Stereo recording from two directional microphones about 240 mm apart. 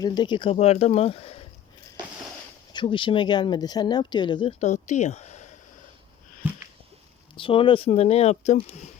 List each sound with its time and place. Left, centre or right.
0.0 s speech: centre
2.7 s speech: left
6.4 s a sound: centre
7.3 s speech: left